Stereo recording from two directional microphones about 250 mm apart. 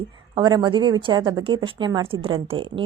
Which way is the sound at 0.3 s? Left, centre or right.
Centre.